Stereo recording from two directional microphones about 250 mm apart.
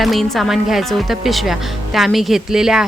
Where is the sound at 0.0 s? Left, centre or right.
Centre.